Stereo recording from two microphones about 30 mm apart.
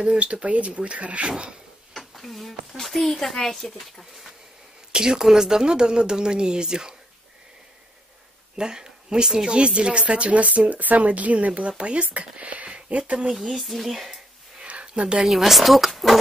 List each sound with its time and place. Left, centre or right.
0.2 s speech: right
2.0 s a sound: centre
2.8 s speech: centre
4.9 s speech: right
8.5 s speech: right
9.5 s speech: right
13.5 s speech: centre
14.6 s a sound: right
15.2 s speech: centre